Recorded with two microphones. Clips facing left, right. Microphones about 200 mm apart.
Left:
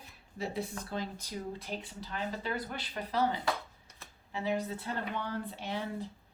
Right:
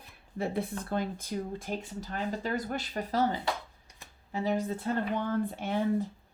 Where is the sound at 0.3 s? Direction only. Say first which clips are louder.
Right 4 dB; 55° right (ahead or behind).